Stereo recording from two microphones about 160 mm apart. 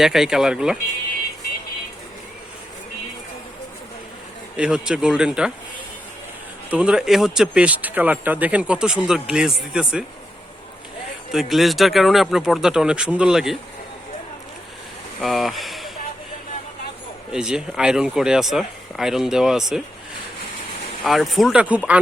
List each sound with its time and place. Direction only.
0.0 s speech: centre (ahead or behind)
4.5 s speech: 5° right (ahead or behind)
6.7 s speech: 5° right (ahead or behind)
11.3 s speech: centre (ahead or behind)
15.2 s a sound: centre (ahead or behind)
17.3 s speech: 5° right (ahead or behind)
21.0 s speech: centre (ahead or behind)